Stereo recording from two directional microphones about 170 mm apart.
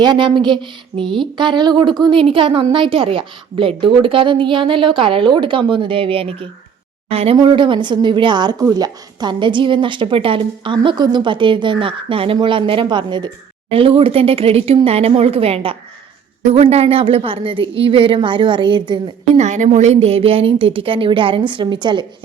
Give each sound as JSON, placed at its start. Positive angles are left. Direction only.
{"t": 0.0, "sound": "a woman's voice", "side_deg": -25}
{"t": 19.3, "sound": "a woman's voice", "side_deg": -40}